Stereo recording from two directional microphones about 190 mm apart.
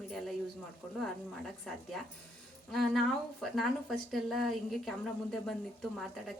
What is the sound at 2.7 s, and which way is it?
A woman's voice, centre (ahead or behind).